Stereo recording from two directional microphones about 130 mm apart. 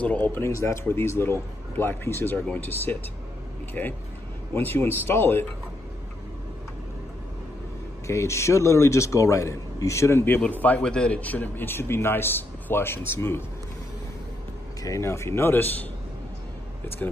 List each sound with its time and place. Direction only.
0.0 s a man's voice: 10° left (ahead or behind)
8.1 s a man's voice: 20° left (ahead or behind)
14.8 s a man's voice: 25° left (ahead or behind)